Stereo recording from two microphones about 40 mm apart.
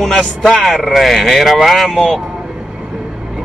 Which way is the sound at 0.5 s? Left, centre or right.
Centre.